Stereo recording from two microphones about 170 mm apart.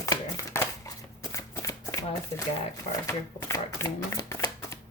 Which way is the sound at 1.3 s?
20° left (ahead or behind).